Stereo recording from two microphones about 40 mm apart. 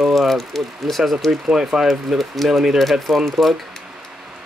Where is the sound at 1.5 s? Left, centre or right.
Centre.